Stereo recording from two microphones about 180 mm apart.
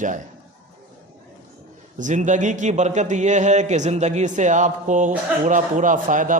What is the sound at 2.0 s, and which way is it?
A man's voice, 45° right (ahead or behind).